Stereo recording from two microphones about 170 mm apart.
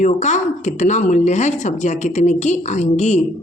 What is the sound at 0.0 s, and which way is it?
A woman's voice, 45° left (ahead or behind).